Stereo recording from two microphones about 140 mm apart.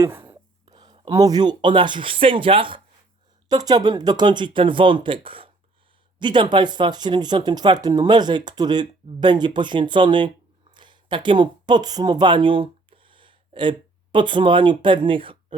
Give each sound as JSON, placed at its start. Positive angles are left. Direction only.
{"t": 0.0, "sound": "speech", "side_deg": -20}